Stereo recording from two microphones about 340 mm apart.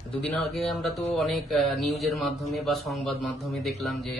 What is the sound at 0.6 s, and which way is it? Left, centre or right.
Speech, centre.